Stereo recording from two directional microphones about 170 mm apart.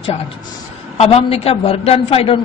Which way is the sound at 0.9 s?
35° left (ahead or behind).